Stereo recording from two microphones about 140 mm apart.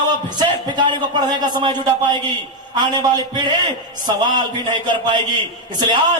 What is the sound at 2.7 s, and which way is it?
Speech, 30° right (ahead or behind).